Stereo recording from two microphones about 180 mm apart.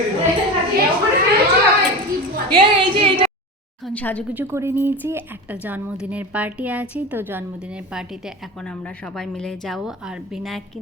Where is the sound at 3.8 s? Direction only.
10° left (ahead or behind).